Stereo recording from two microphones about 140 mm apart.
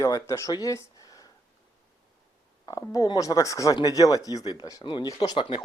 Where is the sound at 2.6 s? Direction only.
25° left (ahead or behind).